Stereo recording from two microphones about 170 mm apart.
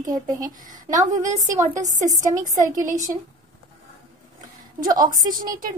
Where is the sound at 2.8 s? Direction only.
50° right (ahead or behind).